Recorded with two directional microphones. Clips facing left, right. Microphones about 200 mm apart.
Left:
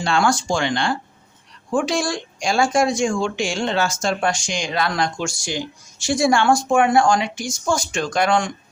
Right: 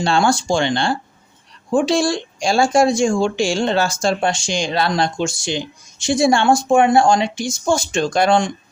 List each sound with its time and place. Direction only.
0.0 s speech: 30° right (ahead or behind)